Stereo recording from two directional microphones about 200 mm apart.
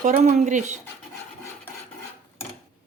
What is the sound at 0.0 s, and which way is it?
Speech, 35° right (ahead or behind).